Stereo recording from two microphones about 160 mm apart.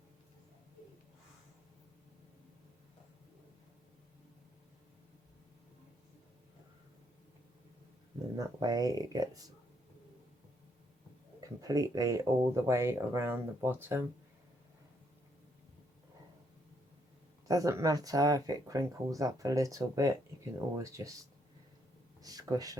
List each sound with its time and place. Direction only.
8.4 s speech: 25° right (ahead or behind)
11.3 s speech: 20° right (ahead or behind)
17.5 s speech: 20° right (ahead or behind)
22.2 s speech: 25° right (ahead or behind)